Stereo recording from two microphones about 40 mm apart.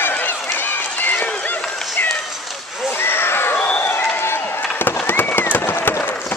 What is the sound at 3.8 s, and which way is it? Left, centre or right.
Run, left.